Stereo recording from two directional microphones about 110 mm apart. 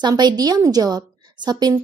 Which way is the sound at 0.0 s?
40° right (ahead or behind).